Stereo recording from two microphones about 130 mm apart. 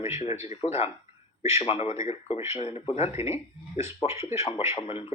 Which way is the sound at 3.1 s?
20° right (ahead or behind).